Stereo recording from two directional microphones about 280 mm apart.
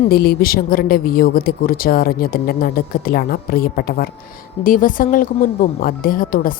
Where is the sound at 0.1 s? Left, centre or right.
Left.